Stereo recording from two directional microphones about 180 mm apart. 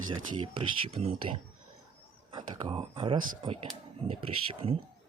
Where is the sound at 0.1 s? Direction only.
30° right (ahead or behind).